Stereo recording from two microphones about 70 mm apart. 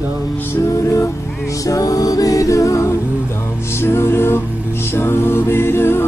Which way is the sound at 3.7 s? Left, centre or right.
Left.